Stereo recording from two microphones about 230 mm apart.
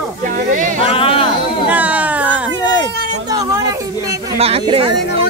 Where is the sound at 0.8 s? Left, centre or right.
Left.